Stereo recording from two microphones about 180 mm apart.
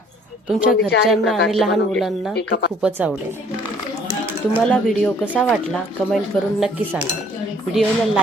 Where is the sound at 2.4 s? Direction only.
70° left (ahead or behind).